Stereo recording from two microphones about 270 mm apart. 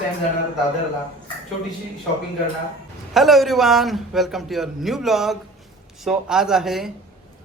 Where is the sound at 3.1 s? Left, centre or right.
Centre.